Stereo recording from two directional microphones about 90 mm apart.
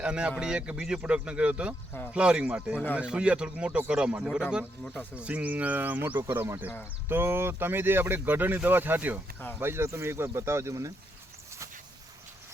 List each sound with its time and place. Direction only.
0.0 s speech: 10° right (ahead or behind); by 10.9 s 35° right (ahead or behind)